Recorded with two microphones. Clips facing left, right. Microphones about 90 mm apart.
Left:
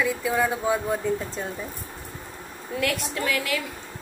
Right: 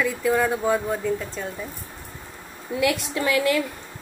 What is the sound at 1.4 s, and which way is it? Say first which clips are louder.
Speech: even; 25° left (ahead or behind).